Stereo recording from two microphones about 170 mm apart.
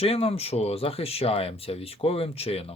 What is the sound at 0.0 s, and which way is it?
Speech, 35° left (ahead or behind).